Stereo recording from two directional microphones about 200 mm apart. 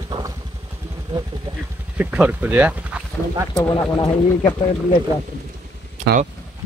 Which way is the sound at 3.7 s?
20° left (ahead or behind).